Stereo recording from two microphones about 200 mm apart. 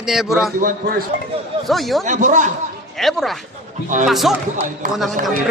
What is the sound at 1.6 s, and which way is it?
Speech, centre (ahead or behind).